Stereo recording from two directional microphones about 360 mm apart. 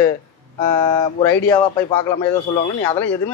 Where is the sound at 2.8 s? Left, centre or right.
Centre.